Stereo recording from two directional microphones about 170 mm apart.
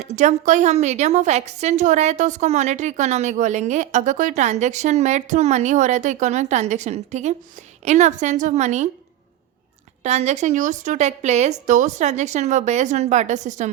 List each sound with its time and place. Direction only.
0.0 s a woman's voice: 45° right (ahead or behind)
10.0 s a woman's voice: 40° right (ahead or behind)